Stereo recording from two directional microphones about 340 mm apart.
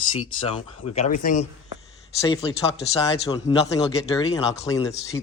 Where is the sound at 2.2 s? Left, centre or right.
Centre.